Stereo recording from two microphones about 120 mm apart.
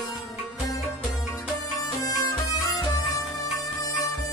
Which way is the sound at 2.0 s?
30° left (ahead or behind).